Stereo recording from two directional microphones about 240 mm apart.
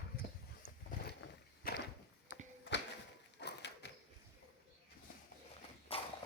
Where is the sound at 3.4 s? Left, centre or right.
Left.